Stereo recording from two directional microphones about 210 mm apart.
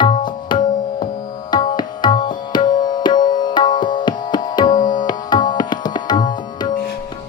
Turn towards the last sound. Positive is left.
turn(degrees=20)  # may be behind; listen again after turning